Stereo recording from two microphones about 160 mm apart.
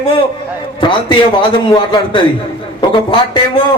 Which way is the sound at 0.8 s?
30° left (ahead or behind).